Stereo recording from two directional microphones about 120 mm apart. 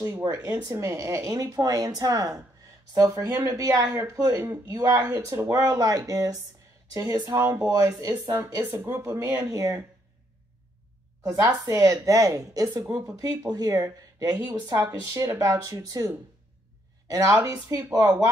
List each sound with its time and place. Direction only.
0.7 s speech: 25° right (ahead or behind)
11.2 s speech: 20° right (ahead or behind)
11.8 s speech: 30° right (ahead or behind)
17.1 s speech: 25° right (ahead or behind)